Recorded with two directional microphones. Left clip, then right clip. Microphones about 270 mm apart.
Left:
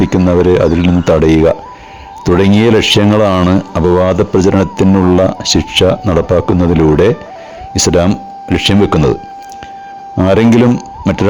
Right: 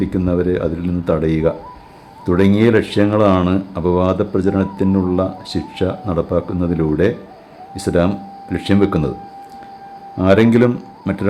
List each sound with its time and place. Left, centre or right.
0.0 s speech: left
10.2 s speech: left